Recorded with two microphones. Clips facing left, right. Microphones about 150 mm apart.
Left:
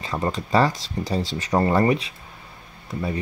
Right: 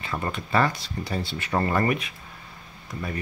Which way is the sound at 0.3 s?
35° left (ahead or behind).